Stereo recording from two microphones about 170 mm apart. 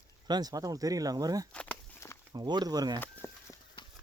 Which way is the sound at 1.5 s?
5° left (ahead or behind).